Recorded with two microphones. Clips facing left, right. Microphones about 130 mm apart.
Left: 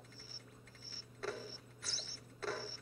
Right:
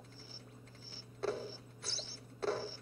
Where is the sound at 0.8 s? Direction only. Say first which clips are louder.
Right 6 dB; 25° right (ahead or behind).